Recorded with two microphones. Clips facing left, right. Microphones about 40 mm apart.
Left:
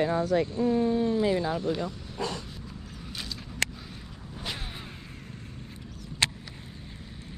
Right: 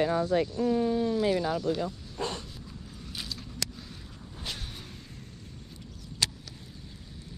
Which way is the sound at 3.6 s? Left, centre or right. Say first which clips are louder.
Left 9 dB; left.